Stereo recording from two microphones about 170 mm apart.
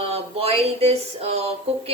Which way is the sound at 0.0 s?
35° right (ahead or behind).